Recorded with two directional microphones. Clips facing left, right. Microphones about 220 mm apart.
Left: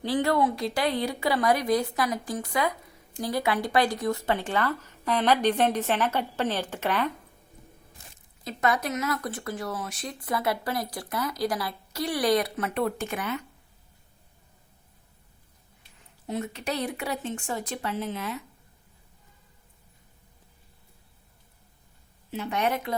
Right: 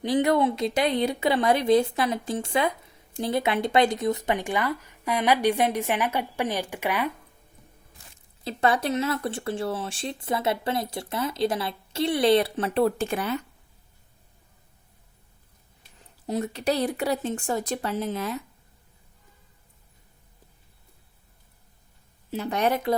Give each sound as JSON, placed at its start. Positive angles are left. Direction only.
{"t": 0.0, "sound": "speech", "side_deg": -20}
{"t": 8.4, "sound": "speech", "side_deg": -30}
{"t": 16.2, "sound": "speech", "side_deg": -35}
{"t": 22.3, "sound": "speech", "side_deg": -40}